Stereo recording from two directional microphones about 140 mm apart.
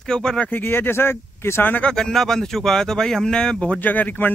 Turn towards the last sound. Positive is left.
turn(degrees=10)  # may be behind; listen again after turning